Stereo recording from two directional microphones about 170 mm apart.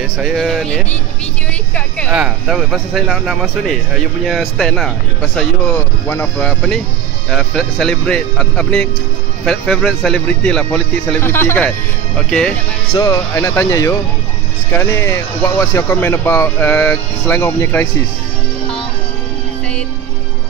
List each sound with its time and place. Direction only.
0.2 s speech: centre (ahead or behind)
2.1 s speech: 5° right (ahead or behind)
6.0 s speech: 10° left (ahead or behind)
12.9 s speech: 20° left (ahead or behind)